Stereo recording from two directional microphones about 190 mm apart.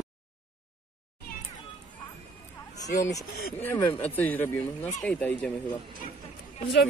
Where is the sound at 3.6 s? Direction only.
10° left (ahead or behind).